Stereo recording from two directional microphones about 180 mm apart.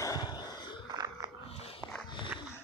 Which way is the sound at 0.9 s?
20° right (ahead or behind).